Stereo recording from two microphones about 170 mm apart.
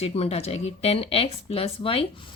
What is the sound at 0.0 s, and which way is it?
Speech, 35° left (ahead or behind).